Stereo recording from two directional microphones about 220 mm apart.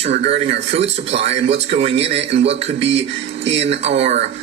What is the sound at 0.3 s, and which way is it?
Speech, 30° right (ahead or behind).